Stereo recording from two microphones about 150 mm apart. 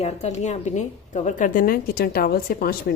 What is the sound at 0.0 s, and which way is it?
A woman's voice, 50° left (ahead or behind).